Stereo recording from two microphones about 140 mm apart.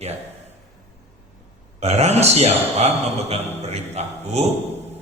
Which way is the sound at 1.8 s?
50° right (ahead or behind).